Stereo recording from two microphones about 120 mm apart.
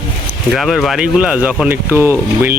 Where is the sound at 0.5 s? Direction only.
Centre (ahead or behind).